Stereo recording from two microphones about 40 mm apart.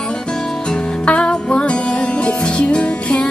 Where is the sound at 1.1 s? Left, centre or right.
Left.